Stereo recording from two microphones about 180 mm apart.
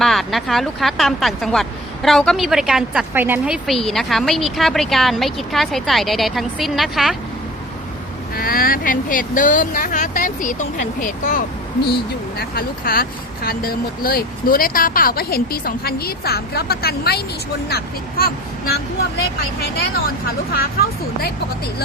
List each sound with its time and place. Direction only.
0.0 s speech: centre (ahead or behind)
8.4 s speech: 55° left (ahead or behind)
20.5 s speech: 55° left (ahead or behind)